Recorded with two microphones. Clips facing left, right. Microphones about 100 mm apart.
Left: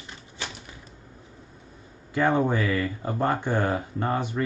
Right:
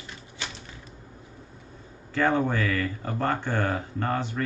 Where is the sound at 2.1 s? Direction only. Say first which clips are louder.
Left 1 dB; 15° left (ahead or behind).